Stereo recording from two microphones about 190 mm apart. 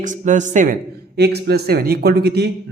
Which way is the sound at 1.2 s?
60° right (ahead or behind).